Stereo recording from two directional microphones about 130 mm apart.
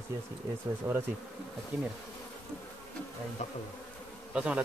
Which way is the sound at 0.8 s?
15° right (ahead or behind).